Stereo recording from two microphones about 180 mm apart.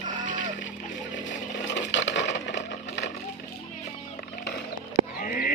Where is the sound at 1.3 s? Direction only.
85° left.